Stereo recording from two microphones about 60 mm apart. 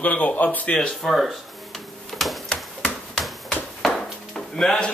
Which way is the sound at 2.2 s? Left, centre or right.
Centre.